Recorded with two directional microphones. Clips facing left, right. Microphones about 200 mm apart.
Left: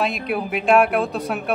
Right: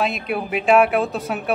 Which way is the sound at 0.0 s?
Centre (ahead or behind).